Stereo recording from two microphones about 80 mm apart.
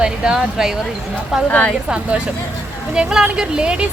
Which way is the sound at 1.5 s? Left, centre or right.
Centre.